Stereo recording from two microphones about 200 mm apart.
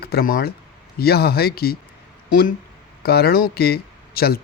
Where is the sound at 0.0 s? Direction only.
50° left (ahead or behind).